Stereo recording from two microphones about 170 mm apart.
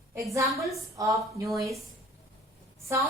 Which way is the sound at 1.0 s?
20° right (ahead or behind).